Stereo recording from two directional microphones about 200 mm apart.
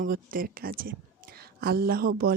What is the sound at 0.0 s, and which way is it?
A woman's voice, 45° right (ahead or behind).